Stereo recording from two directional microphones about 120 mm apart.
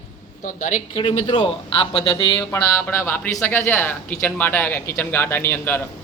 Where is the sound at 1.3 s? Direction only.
40° left (ahead or behind).